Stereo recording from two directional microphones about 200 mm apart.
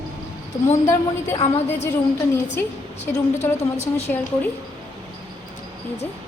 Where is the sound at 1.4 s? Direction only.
35° left (ahead or behind).